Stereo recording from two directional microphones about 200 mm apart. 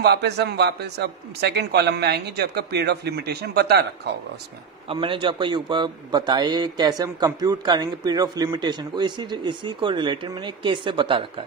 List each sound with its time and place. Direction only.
0.0 s a man's voice: 55° right (ahead or behind)
4.8 s a man's voice: 25° right (ahead or behind)